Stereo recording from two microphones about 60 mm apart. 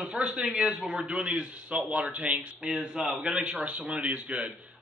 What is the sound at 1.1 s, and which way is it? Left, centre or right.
Speech, centre.